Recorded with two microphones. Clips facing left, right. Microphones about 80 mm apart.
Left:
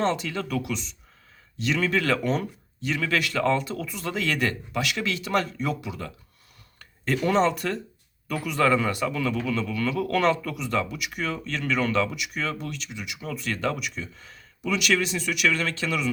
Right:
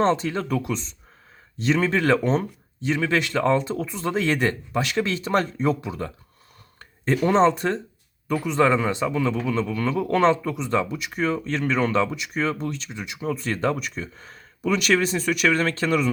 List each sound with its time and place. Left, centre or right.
0.0 s a man's voice: right